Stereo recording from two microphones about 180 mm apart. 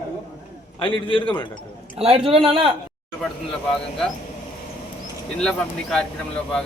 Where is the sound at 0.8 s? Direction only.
30° left (ahead or behind).